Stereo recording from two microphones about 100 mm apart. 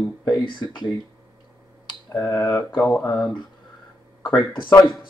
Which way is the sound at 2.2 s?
30° left (ahead or behind).